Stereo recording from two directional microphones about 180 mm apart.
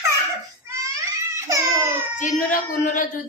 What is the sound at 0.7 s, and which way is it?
Baby cry, 15° right (ahead or behind).